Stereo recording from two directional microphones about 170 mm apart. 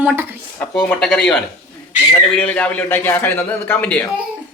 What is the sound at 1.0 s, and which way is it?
Speech, 5° left (ahead or behind).